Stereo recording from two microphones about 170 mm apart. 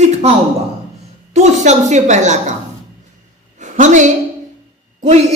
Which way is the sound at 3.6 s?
45° right (ahead or behind).